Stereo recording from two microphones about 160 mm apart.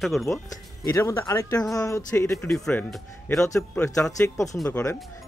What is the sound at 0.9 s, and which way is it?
Speech, 20° left (ahead or behind).